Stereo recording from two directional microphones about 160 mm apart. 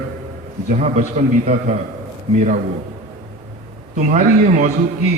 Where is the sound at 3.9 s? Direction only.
55° right (ahead or behind).